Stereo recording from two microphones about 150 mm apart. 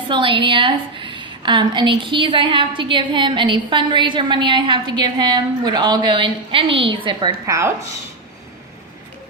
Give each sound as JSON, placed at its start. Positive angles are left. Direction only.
{"t": 0.1, "sound": "a woman's voice", "side_deg": -35}
{"t": 7.4, "sound": "speech", "side_deg": -20}